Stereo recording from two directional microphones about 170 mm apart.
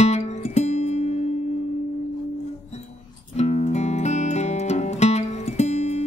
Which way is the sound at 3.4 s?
40° left (ahead or behind).